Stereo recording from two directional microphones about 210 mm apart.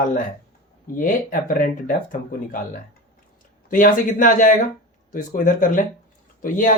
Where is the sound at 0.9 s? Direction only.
40° left (ahead or behind).